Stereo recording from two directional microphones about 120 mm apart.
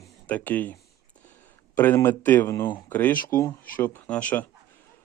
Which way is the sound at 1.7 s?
20° left (ahead or behind).